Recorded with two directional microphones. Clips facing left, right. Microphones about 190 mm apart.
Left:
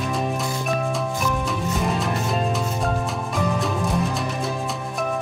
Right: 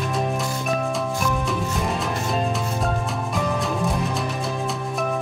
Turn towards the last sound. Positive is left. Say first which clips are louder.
# right 1 dB
turn(degrees=0)  # may be behind; listen again after turning